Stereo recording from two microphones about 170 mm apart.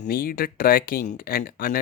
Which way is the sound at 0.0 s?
60° left (ahead or behind).